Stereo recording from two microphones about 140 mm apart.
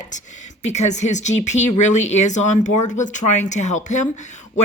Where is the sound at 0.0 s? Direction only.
60° left (ahead or behind).